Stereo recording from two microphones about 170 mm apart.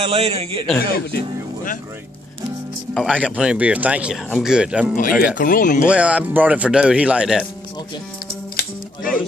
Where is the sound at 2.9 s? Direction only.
5° right (ahead or behind).